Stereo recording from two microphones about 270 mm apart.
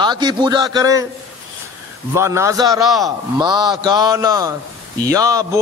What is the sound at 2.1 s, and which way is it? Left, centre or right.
Speech, centre.